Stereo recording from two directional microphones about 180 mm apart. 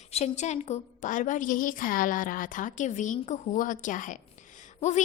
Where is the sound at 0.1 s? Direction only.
40° left (ahead or behind).